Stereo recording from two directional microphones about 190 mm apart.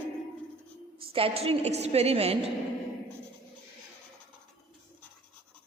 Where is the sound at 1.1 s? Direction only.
30° right (ahead or behind).